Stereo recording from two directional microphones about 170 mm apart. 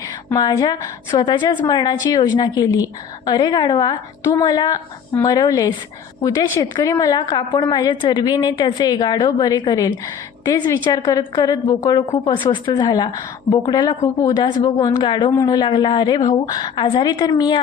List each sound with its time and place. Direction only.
0.3 s a woman's voice: 25° left (ahead or behind)